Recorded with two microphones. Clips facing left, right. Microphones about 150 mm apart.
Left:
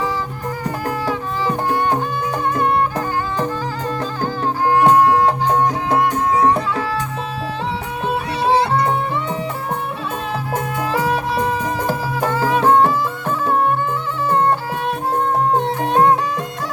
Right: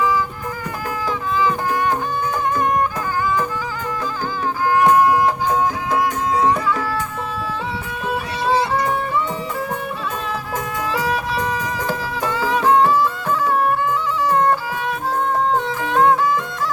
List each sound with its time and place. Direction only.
1.7 s music: 30° left (ahead or behind)
2.2 s music: 65° left (ahead or behind)
4.7 s music: 30° left (ahead or behind)
5.9 s music: 60° left (ahead or behind)
8.5 s music: 60° left (ahead or behind)
12.2 s music: 50° left (ahead or behind)
13.5 s music: 25° left (ahead or behind)
15.5 s music: 60° left (ahead or behind)